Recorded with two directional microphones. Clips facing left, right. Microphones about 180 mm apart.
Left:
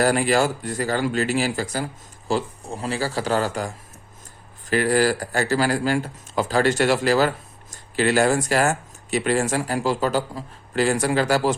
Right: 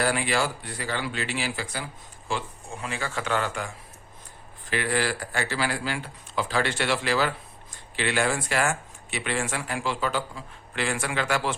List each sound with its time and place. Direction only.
0.0 s speech: 45° left (ahead or behind)